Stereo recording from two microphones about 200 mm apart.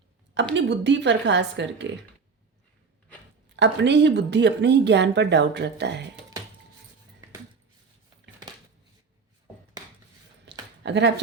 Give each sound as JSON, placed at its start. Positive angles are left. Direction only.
{"t": 0.5, "sound": "speech", "side_deg": -65}
{"t": 3.5, "sound": "speech", "side_deg": -60}
{"t": 10.4, "sound": "a sound", "side_deg": -60}